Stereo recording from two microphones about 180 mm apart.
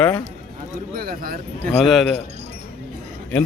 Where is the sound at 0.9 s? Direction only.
55° right (ahead or behind).